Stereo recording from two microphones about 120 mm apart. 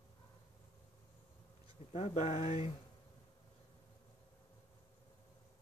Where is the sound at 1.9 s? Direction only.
60° left (ahead or behind).